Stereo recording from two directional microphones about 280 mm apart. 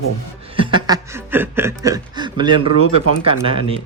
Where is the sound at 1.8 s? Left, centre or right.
Centre.